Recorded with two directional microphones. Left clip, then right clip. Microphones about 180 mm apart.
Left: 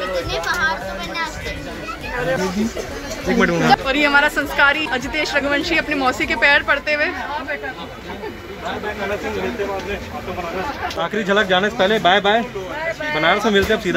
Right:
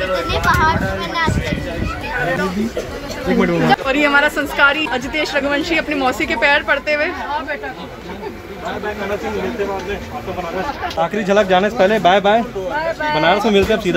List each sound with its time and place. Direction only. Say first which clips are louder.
0.3 s a child's voice: right 6 dB; centre (ahead or behind)
3.3 s speech: even; 15° left (ahead or behind)
3.8 s speech: right 1 dB; 5° right (ahead or behind)
11.0 s a child's voice: right 3 dB; centre (ahead or behind)